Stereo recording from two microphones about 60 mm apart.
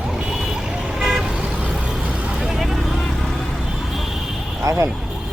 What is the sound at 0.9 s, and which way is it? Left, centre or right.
Vehicle, centre.